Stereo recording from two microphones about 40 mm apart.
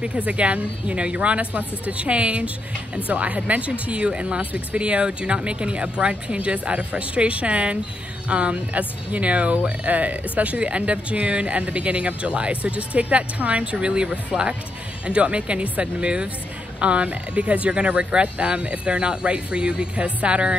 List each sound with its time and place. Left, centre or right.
0.2 s speech: right